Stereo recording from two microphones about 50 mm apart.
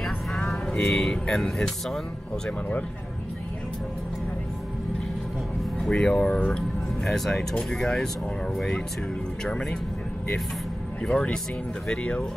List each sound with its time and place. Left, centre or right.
0.8 s speech: centre
5.8 s speech: centre
7.1 s speech: centre
9.4 s speech: centre
11.0 s speech: centre